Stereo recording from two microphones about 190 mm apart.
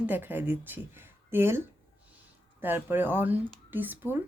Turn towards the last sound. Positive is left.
turn(degrees=-10)  # may be behind; listen again after turning